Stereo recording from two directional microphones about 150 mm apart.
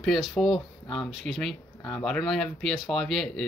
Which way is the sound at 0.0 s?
Centre (ahead or behind).